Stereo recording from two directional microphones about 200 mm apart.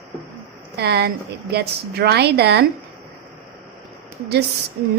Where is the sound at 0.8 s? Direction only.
55° right (ahead or behind).